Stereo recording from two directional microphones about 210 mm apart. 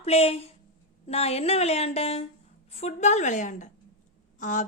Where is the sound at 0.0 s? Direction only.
30° left (ahead or behind).